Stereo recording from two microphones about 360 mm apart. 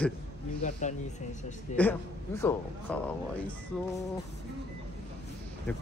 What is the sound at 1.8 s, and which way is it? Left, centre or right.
A man's voice, centre.